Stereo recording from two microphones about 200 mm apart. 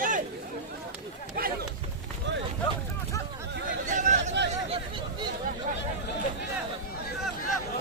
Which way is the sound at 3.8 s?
40° right (ahead or behind).